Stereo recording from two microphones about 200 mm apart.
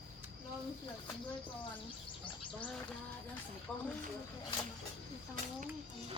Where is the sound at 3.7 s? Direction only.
Centre (ahead or behind).